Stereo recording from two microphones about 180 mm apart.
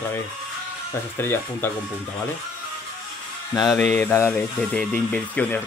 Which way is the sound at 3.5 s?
20° left (ahead or behind).